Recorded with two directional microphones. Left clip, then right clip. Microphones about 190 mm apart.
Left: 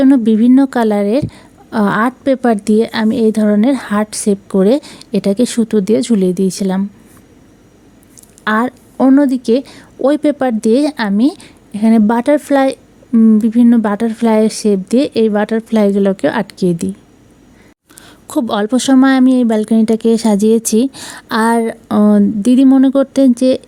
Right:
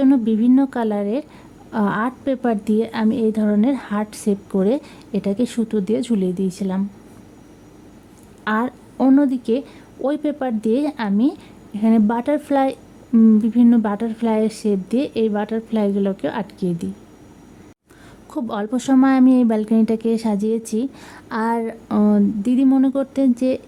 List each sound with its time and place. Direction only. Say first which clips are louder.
0.0 s speech: left 7 dB; 20° left (ahead or behind)
8.4 s speech: left 7 dB; 20° left (ahead or behind)
18.3 s speech: left 9 dB; 25° left (ahead or behind)